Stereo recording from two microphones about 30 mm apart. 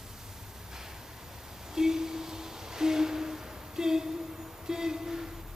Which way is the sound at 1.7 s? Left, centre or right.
Centre.